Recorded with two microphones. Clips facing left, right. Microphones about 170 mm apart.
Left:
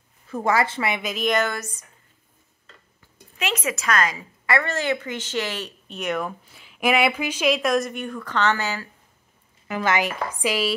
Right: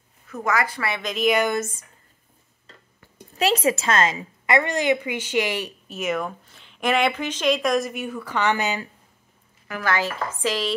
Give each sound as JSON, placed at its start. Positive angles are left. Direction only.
{"t": 0.3, "sound": "speech", "side_deg": 30}
{"t": 1.0, "sound": "a woman's voice", "side_deg": 0}
{"t": 1.3, "sound": "speech", "side_deg": -15}
{"t": 1.6, "sound": "a woman's voice", "side_deg": -25}
{"t": 3.3, "sound": "a woman's voice", "side_deg": -35}
{"t": 5.9, "sound": "a woman's voice", "side_deg": 0}
{"t": 9.7, "sound": "speech", "side_deg": 20}